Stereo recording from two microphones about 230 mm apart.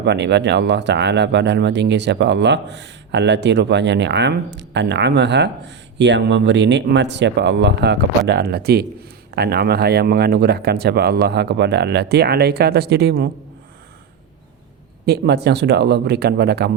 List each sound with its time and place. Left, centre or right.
0.0 s speech: right
15.0 s speech: right